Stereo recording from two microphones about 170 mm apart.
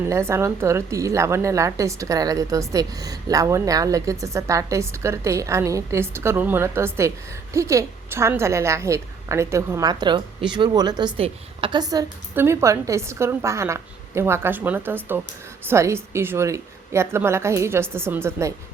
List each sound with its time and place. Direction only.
0.1 s a woman's voice: 15° right (ahead or behind)